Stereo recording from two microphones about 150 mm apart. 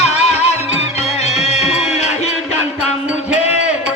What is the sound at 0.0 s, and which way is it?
Music, 45° left (ahead or behind).